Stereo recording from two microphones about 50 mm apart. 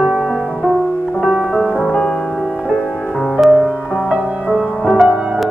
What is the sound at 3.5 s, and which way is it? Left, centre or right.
Music, centre.